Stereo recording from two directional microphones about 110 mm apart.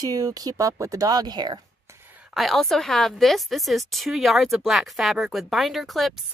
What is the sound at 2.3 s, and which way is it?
A woman's voice, centre (ahead or behind).